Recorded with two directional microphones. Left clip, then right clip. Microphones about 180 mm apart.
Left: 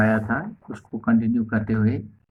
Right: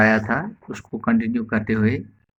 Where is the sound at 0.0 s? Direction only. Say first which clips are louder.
Right 4 dB; 25° right (ahead or behind).